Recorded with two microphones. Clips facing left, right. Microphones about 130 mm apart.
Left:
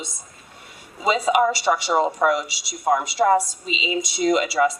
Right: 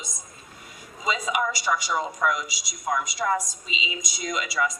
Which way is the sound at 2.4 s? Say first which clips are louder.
Left 8 dB; 65° left (ahead or behind).